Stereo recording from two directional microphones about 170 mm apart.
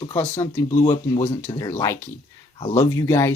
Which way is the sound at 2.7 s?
15° left (ahead or behind).